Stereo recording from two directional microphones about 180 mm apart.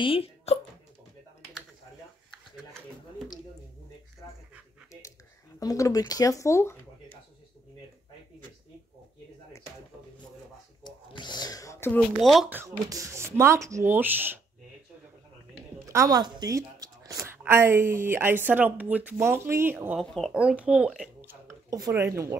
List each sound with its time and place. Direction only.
0.0 s speech: 30° left (ahead or behind)
5.6 s speech: 20° left (ahead or behind)
10.8 s a sound: 25° left (ahead or behind)
12.2 s speech: centre (ahead or behind)
12.5 s speech: 20° right (ahead or behind)
15.9 s a sound: 20° right (ahead or behind)
17.4 s speech: 10° right (ahead or behind)
20.0 s speech: centre (ahead or behind); by 22.4 s 15° right (ahead or behind)